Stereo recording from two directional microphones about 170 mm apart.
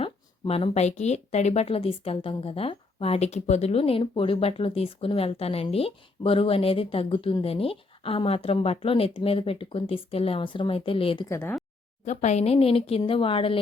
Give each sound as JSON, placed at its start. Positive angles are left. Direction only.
{"t": 0.0, "sound": "speech", "side_deg": 35}
{"t": 11.3, "sound": "speech", "side_deg": 15}
{"t": 12.0, "sound": "speech", "side_deg": 40}